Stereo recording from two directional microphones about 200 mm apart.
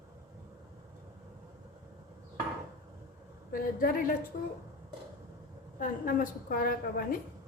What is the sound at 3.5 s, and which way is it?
Speech, 45° left (ahead or behind).